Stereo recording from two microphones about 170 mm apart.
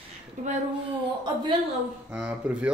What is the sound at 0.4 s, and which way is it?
Speech, 45° right (ahead or behind).